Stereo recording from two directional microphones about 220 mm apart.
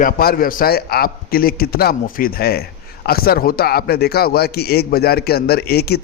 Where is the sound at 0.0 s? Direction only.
40° left (ahead or behind).